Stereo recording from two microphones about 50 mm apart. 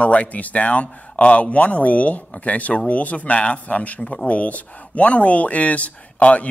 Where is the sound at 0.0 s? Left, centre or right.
Left.